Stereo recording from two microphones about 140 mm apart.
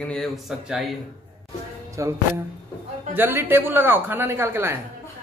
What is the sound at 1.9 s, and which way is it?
Speech, 20° right (ahead or behind).